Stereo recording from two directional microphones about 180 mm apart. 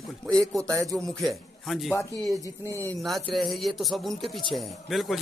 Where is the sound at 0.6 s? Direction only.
15° right (ahead or behind).